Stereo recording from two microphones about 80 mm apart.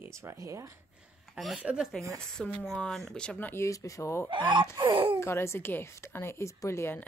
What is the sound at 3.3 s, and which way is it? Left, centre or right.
Speech, left.